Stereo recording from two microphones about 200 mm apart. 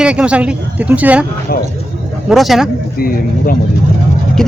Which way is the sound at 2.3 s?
Centre (ahead or behind).